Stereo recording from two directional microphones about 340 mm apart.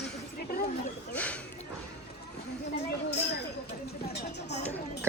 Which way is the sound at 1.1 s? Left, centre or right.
Centre.